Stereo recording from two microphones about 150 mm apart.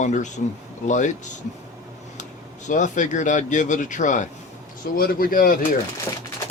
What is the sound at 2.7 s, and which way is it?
Speech, 55° left (ahead or behind).